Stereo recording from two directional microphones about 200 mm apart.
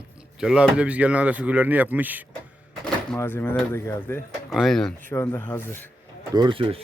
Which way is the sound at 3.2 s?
10° left (ahead or behind).